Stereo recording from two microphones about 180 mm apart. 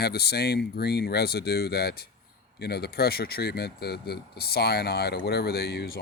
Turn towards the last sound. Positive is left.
turn(degrees=60)  # may be behind; listen again after turning